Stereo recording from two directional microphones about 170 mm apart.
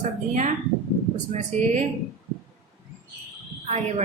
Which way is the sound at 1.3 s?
45° right (ahead or behind).